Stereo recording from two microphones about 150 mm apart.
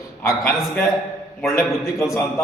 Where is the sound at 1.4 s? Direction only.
20° left (ahead or behind).